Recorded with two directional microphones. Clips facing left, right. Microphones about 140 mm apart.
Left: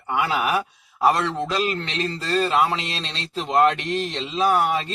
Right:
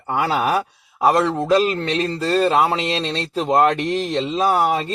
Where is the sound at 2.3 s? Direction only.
40° right (ahead or behind).